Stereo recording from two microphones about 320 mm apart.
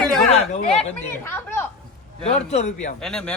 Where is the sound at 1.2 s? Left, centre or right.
Centre.